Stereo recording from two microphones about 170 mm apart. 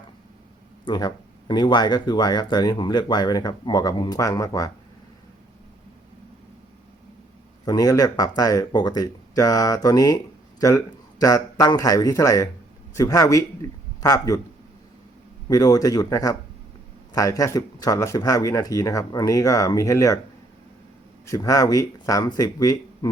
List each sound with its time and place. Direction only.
0.9 s speech: 25° left (ahead or behind)
7.6 s a man's voice: 25° left (ahead or behind)
15.4 s speech: 20° left (ahead or behind)
21.2 s speech: 20° left (ahead or behind)